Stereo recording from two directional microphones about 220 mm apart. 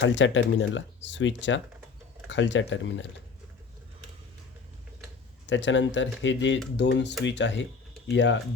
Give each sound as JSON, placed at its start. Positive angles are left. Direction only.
{"t": 0.0, "sound": "speech", "side_deg": 55}
{"t": 5.5, "sound": "speech", "side_deg": 55}